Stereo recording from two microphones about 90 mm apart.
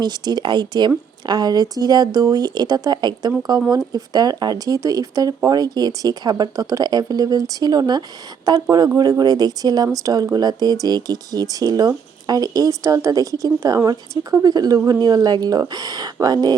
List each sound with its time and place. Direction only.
0.0 s speech: 50° right (ahead or behind)